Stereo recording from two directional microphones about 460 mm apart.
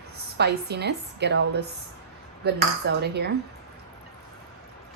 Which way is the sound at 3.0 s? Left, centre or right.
Right.